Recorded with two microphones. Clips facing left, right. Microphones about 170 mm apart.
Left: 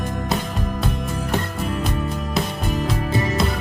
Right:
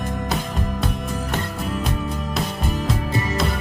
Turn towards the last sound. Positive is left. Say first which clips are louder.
# left 2 dB
turn(degrees=0)  # may be behind; listen again after turning